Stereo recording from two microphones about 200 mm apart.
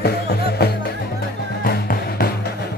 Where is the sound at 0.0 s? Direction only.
55° left (ahead or behind).